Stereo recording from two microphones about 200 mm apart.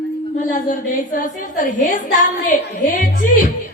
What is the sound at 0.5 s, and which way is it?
A woman's voice, 40° left (ahead or behind).